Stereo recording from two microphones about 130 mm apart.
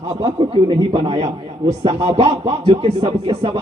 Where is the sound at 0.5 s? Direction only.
50° right (ahead or behind).